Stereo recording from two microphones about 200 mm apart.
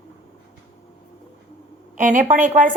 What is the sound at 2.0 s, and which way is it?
Speech, 40° right (ahead or behind).